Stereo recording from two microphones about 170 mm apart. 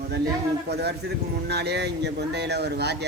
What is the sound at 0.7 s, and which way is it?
Speech, 75° right (ahead or behind).